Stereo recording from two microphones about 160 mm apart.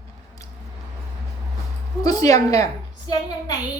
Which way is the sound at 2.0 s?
25° left (ahead or behind).